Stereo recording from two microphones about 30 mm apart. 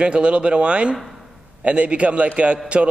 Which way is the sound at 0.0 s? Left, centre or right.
Right.